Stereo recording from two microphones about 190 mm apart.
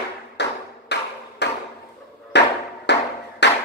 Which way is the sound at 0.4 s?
65° left (ahead or behind).